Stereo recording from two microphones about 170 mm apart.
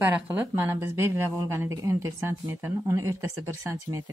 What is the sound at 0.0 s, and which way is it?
A woman's voice, 10° right (ahead or behind).